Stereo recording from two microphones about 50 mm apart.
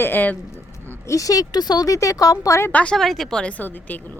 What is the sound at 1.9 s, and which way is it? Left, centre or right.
Speech, left.